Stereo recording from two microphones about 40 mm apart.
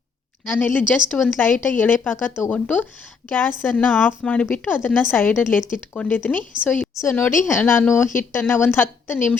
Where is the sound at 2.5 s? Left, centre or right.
Left.